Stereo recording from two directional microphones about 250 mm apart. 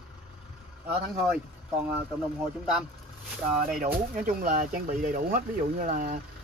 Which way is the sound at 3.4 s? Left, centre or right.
Right.